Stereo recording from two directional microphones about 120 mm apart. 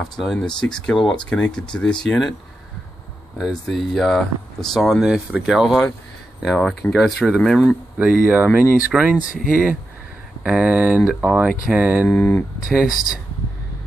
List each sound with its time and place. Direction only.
0.1 s speech: 5° left (ahead or behind)
3.3 s speech: centre (ahead or behind)
8.0 s speech: 10° right (ahead or behind)
10.4 s speech: 10° right (ahead or behind)
12.1 s speech: 15° left (ahead or behind)
12.6 s speech: 5° right (ahead or behind)